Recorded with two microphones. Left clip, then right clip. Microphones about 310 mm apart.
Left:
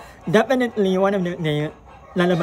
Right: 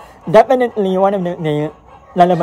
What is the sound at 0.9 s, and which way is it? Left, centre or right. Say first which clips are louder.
Speech: right 7 dB; right.